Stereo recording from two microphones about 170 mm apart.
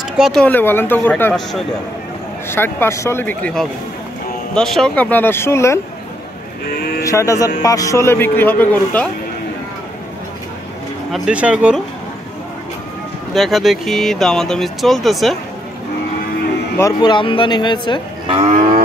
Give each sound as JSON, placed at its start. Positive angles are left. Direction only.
{"t": 0.2, "sound": "a man's voice", "side_deg": 5}
{"t": 6.6, "sound": "speech", "side_deg": 65}
{"t": 7.1, "sound": "a man's voice", "side_deg": 20}
{"t": 11.1, "sound": "speech", "side_deg": -5}
{"t": 13.3, "sound": "speech", "side_deg": 0}
{"t": 16.7, "sound": "speech", "side_deg": 20}